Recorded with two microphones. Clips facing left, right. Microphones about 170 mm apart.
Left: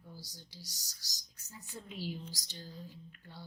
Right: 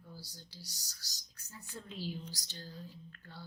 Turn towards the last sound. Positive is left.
turn(degrees=15)  # may be behind; listen again after turning